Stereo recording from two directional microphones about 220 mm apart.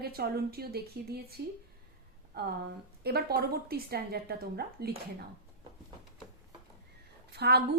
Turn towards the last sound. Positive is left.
turn(degrees=-45)  # may be behind; listen again after turning